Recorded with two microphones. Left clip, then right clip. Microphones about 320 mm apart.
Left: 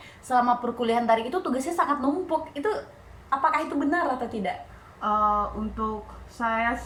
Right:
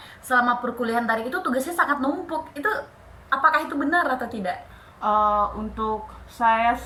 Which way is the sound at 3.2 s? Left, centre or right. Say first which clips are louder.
Right 4 dB; centre.